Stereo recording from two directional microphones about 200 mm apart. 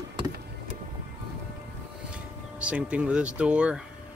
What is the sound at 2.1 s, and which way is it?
Speech, 5° right (ahead or behind).